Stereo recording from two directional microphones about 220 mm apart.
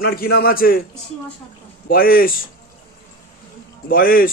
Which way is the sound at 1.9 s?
40° left (ahead or behind).